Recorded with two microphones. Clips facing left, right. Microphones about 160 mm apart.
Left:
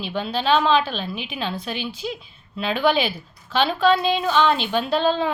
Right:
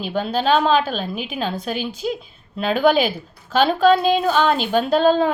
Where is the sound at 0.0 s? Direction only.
45° right (ahead or behind).